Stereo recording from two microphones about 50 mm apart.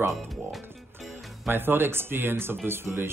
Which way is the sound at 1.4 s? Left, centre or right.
Right.